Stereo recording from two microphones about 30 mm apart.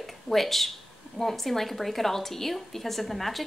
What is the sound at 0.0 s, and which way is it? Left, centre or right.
Speech, centre.